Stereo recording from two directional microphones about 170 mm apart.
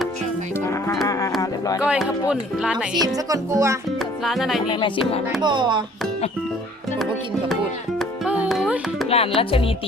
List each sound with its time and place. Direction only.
0.6 s livestock: 15° left (ahead or behind)
1.0 s music: 20° left (ahead or behind)
1.8 s speech: 5° right (ahead or behind)
3.2 s speech: 20° right (ahead or behind)
4.2 s speech: centre (ahead or behind)
4.7 s music: 30° left (ahead or behind)
5.4 s speech: 25° right (ahead or behind)
7.0 s music: centre (ahead or behind)
9.0 s speech: 35° left (ahead or behind)